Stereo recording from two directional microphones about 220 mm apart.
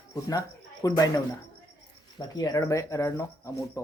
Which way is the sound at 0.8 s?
15° left (ahead or behind).